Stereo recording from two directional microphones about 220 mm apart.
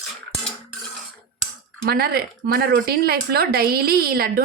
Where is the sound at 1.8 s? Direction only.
45° right (ahead or behind).